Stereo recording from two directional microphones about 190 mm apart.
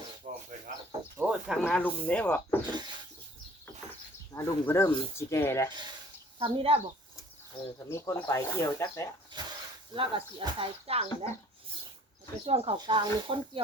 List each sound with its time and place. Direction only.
0.2 s bird: 40° right (ahead or behind)
1.2 s speech: 5° right (ahead or behind)
1.8 s speech: 5° left (ahead or behind)
4.4 s speech: 15° left (ahead or behind)
6.4 s speech: 30° right (ahead or behind)
7.9 s speech: 15° left (ahead or behind)
9.3 s a sound: 20° right (ahead or behind)
9.9 s speech: 25° right (ahead or behind)
12.5 s speech: 30° right (ahead or behind)